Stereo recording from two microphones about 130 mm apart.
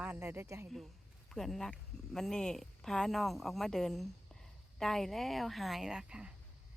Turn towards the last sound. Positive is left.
turn(degrees=-5)  # may be behind; listen again after turning